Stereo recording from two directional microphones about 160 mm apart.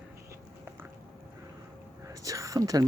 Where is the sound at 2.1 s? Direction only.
20° right (ahead or behind).